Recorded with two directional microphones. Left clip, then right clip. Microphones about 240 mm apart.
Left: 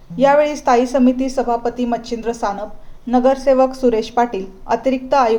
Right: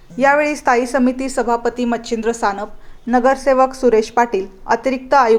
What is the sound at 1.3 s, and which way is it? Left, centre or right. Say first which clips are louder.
Speech: right 1 dB; right.